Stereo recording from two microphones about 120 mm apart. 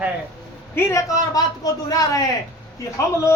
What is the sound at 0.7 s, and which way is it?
A man's voice, 25° left (ahead or behind).